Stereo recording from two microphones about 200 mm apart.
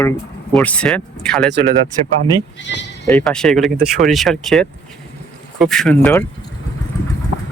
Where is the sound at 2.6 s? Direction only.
60° left (ahead or behind).